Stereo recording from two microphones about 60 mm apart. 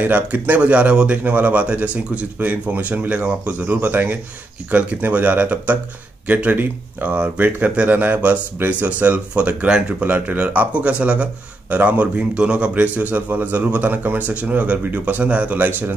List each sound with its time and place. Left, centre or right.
0.0 s a man's voice: right